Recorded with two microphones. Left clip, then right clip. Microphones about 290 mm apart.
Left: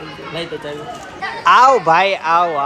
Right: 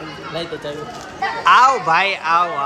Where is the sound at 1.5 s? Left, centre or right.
Centre.